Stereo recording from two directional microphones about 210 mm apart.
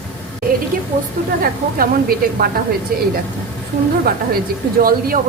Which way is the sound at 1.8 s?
45° right (ahead or behind).